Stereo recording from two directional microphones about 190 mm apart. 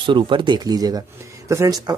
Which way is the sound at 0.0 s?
25° right (ahead or behind).